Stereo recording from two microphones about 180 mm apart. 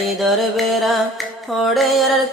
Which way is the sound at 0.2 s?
Centre (ahead or behind).